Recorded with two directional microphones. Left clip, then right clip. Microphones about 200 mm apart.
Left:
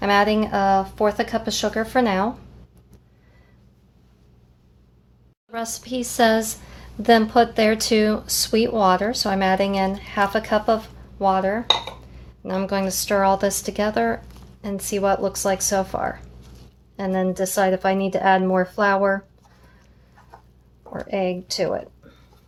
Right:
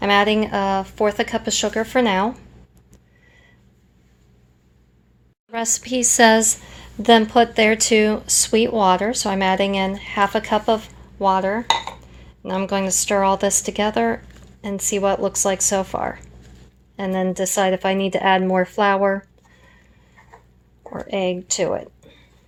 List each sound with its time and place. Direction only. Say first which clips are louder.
0.0 s a woman's voice: right 2 dB; 25° right (ahead or behind)
5.5 s a woman's voice: right 5 dB; 30° right (ahead or behind)
20.9 s speech: right 1 dB; 25° right (ahead or behind)